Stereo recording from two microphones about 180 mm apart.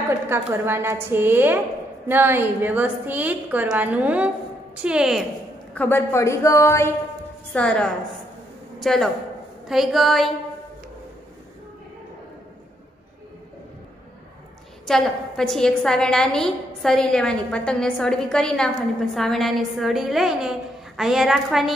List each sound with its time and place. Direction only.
0.3 s a woman's voice: 10° right (ahead or behind)
5.8 s a woman's voice: 10° left (ahead or behind)
14.9 s a woman's voice: 5° left (ahead or behind)